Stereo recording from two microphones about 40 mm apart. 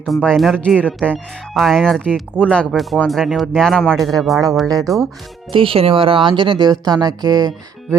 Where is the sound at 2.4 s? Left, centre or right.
Left.